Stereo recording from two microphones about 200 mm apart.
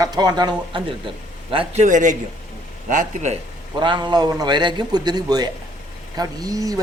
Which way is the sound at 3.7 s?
25° right (ahead or behind).